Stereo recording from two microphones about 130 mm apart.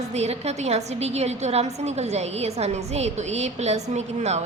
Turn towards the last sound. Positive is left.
turn(degrees=-60)  # may be behind; listen again after turning